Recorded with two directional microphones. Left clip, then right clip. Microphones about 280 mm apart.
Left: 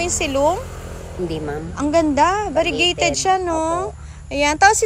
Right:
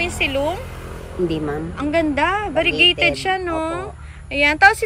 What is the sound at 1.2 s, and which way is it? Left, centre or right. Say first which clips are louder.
Speech: right 2 dB; right.